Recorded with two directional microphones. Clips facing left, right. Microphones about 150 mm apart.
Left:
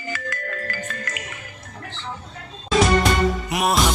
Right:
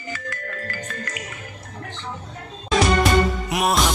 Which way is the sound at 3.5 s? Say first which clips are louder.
Even; centre (ahead or behind).